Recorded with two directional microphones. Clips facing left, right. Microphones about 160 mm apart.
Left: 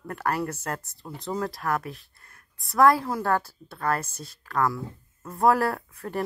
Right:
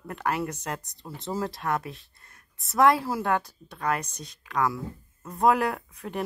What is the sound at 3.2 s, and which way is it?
A woman's voice, 20° right (ahead or behind).